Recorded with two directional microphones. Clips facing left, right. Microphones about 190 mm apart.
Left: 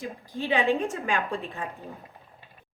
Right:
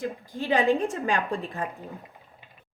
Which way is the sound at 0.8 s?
35° right (ahead or behind).